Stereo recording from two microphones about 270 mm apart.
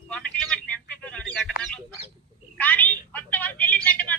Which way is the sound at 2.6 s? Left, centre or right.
Centre.